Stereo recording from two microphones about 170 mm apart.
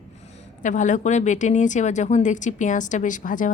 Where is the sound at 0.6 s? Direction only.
50° left (ahead or behind).